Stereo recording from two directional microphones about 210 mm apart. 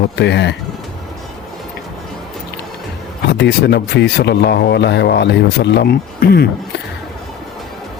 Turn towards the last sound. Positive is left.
turn(degrees=50)  # may be behind; listen again after turning